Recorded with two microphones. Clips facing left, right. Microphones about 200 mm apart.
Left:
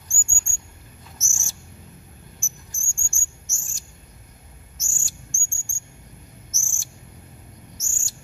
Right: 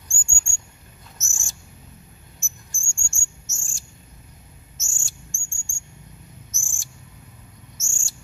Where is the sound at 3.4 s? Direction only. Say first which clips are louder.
Right 1 dB; 30° right (ahead or behind).